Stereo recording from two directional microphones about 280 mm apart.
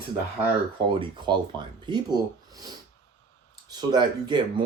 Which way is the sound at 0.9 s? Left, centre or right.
Centre.